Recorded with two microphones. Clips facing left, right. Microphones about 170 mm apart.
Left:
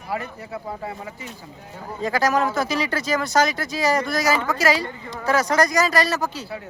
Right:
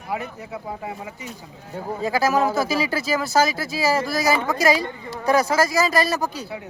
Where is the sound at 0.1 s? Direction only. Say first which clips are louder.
Even; 20° right (ahead or behind).